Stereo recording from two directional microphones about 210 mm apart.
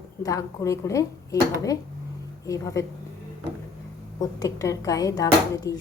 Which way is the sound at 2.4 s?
15° left (ahead or behind).